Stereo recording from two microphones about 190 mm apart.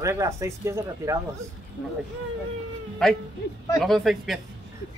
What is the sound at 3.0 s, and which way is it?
Speech, centre (ahead or behind).